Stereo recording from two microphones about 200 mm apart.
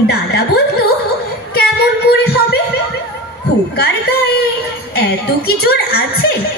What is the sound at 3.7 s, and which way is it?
A woman's voice, 55° left (ahead or behind).